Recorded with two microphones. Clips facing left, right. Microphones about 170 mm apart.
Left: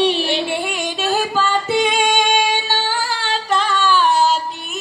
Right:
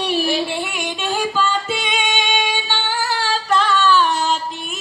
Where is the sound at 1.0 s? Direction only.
40° left (ahead or behind).